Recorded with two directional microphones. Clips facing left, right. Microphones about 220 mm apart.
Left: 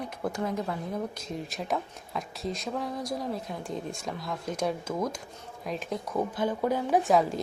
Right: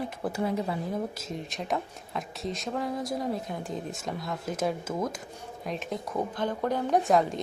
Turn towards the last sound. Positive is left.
turn(degrees=0)  # may be behind; listen again after turning